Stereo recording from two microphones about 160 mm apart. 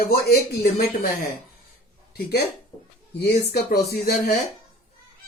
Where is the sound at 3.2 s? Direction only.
90° left.